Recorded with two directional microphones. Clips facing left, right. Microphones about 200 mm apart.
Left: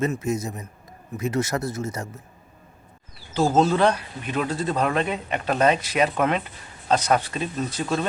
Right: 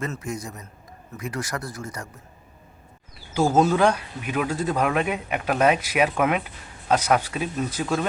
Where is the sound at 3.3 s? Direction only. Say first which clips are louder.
Even; 10° right (ahead or behind).